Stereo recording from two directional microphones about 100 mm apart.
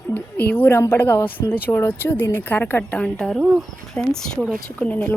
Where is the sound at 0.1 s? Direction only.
15° left (ahead or behind).